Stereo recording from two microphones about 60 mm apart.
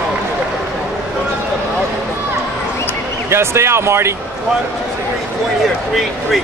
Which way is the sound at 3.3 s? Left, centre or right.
Right.